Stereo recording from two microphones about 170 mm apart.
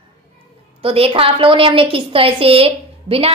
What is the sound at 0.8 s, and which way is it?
A woman's voice, 35° right (ahead or behind).